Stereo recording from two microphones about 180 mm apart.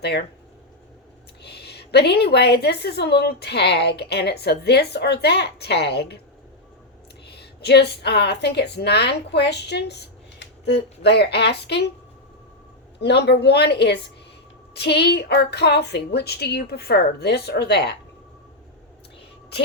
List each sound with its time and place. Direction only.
1.4 s a woman's voice: 65° left (ahead or behind)
7.3 s a woman's voice: 65° left (ahead or behind)
13.0 s a woman's voice: 65° left (ahead or behind)